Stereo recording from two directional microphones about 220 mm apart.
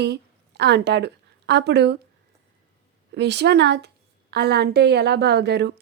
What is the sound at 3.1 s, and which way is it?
A woman's voice, 50° right (ahead or behind).